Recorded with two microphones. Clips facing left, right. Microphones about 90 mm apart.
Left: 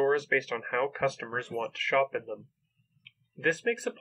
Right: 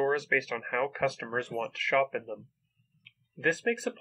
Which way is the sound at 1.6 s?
5° left (ahead or behind).